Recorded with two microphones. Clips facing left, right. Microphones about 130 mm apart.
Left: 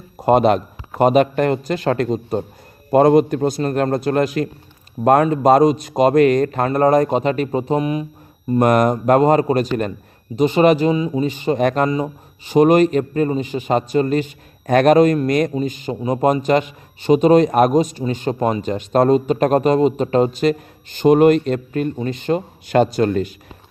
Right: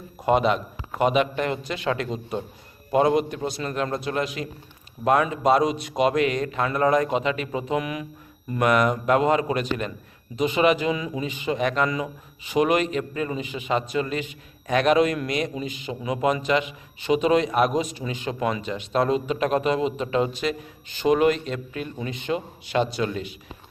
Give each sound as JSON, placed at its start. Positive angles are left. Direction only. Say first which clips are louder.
{"t": 0.2, "sound": "speech", "louder": "left 7 dB", "side_deg": 45}
{"t": 11.9, "sound": "speech", "louder": "left 7 dB", "side_deg": 35}
{"t": 21.9, "sound": "speech", "louder": "left 7 dB", "side_deg": 35}